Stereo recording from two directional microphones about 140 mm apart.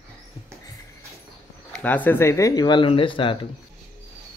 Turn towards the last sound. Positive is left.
turn(degrees=40)  # may be behind; listen again after turning